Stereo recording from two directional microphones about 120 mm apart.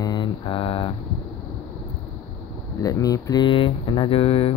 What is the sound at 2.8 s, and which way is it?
Speech, 30° left (ahead or behind).